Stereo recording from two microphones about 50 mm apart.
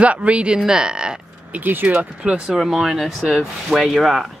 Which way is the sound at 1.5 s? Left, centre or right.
Right.